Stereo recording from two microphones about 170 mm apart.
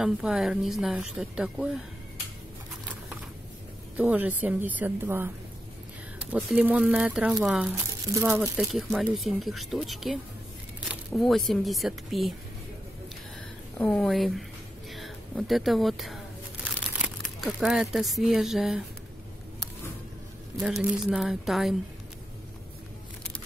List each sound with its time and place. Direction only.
0.0 s speech: 5° right (ahead or behind)
3.9 s a woman's voice: 10° right (ahead or behind)
8.4 s speech: centre (ahead or behind)
13.7 s speech: 5° left (ahead or behind)
20.6 s speech: centre (ahead or behind)